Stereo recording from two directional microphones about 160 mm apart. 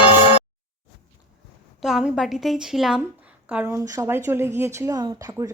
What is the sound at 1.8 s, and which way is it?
A woman's voice, centre (ahead or behind).